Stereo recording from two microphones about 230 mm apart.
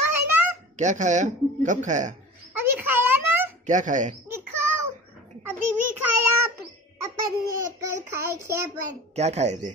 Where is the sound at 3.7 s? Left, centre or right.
Right.